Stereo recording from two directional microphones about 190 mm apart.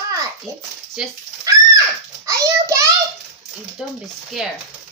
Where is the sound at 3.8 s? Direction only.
5° right (ahead or behind).